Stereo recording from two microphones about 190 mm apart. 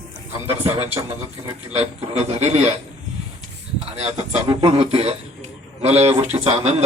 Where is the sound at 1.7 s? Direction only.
30° right (ahead or behind).